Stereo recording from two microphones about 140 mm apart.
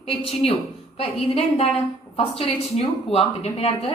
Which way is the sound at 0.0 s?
45° left (ahead or behind).